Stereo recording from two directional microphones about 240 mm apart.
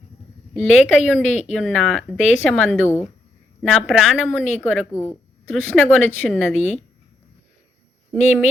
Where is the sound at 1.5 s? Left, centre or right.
Centre.